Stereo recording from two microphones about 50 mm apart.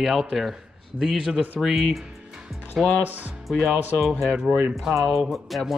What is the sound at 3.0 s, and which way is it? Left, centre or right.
Speech, right.